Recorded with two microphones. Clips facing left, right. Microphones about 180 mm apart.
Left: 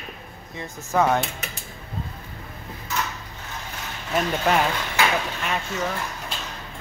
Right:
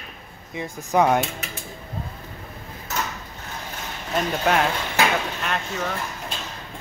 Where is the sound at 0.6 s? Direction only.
15° right (ahead or behind).